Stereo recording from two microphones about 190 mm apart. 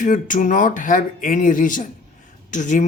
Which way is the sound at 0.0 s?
45° left (ahead or behind).